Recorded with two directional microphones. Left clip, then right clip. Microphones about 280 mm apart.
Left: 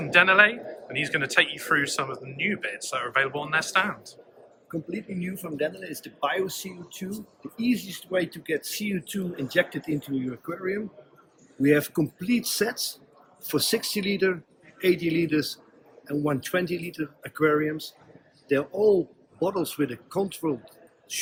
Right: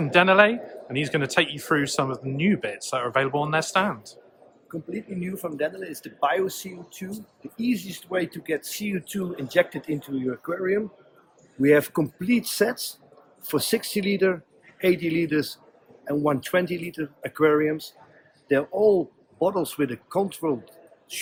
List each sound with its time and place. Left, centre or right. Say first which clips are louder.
0.1 s speech: right 1 dB; centre
5.4 s speech: right 2 dB; centre
11.6 s speech: right 3 dB; right